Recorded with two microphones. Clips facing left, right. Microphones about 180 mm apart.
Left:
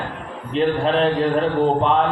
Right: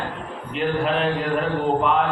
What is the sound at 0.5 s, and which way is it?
Speech, 30° left (ahead or behind).